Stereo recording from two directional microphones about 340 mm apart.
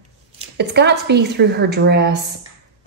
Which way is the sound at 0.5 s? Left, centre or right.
Right.